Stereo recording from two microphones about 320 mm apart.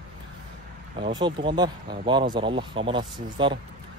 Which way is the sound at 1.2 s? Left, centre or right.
Centre.